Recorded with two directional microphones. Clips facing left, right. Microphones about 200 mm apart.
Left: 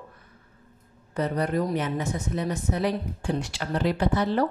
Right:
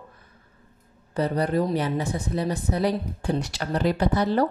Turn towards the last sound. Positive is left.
turn(degrees=-40)  # may be behind; listen again after turning